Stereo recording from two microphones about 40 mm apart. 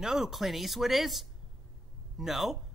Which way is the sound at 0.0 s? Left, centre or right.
Centre.